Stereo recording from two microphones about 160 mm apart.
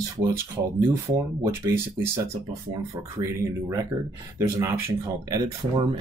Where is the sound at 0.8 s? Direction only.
15° right (ahead or behind).